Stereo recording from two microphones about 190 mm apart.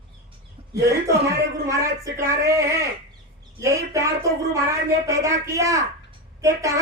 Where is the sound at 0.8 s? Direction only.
15° right (ahead or behind).